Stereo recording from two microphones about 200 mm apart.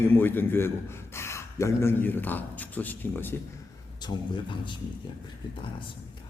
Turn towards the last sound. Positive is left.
turn(degrees=25)  # may be behind; listen again after turning